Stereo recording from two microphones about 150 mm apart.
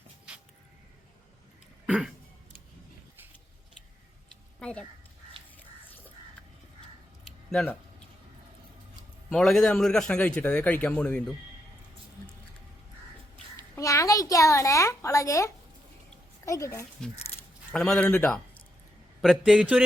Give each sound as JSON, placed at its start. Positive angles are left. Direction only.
{"t": 4.6, "sound": "speech", "side_deg": 5}
{"t": 7.3, "sound": "a sound", "side_deg": 5}
{"t": 9.3, "sound": "a man's voice", "side_deg": 5}
{"t": 13.7, "sound": "a woman's voice", "side_deg": 20}
{"t": 17.7, "sound": "speech", "side_deg": 5}
{"t": 19.2, "sound": "a man's voice", "side_deg": 0}